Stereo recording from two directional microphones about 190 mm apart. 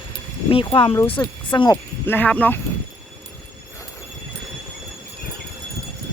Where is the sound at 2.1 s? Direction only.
10° left (ahead or behind).